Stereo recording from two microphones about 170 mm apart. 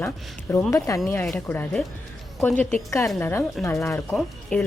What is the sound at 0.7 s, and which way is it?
A woman's voice, 20° left (ahead or behind).